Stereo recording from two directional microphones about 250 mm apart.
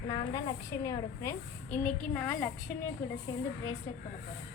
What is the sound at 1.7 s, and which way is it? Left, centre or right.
Speech, left.